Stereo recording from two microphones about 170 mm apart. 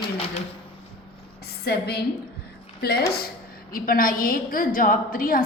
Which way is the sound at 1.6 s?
70° left (ahead or behind).